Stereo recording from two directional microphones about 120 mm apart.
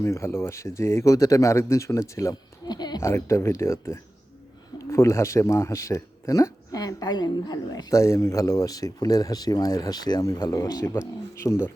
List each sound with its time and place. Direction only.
0.0 s a man's voice: 25° left (ahead or behind)
2.3 s a sound: 35° left (ahead or behind)
3.0 s a man's voice: 20° left (ahead or behind)